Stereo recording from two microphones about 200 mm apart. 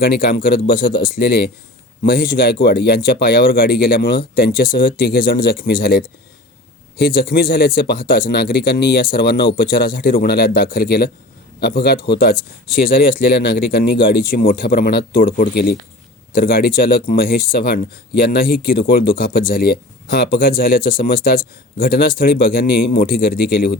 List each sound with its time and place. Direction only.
0.0 s speech: 50° left (ahead or behind)
13.5 s speech: 50° left (ahead or behind)